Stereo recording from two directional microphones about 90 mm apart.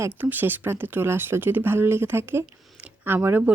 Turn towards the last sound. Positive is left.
turn(degrees=-20)  # may be behind; listen again after turning